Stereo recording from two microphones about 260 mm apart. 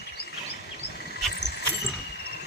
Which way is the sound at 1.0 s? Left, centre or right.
Left.